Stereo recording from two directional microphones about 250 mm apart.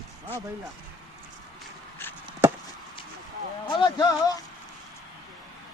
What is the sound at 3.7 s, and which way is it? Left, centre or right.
Speech, centre.